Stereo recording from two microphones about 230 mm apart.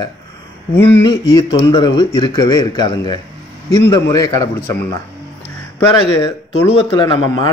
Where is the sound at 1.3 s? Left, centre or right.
Centre.